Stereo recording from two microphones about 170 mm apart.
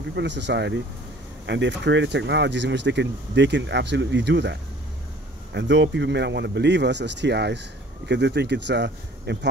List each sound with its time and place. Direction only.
0.1 s speech: 90° right